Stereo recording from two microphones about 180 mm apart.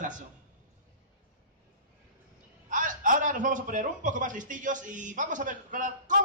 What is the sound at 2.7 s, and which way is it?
A man's voice, 45° right (ahead or behind).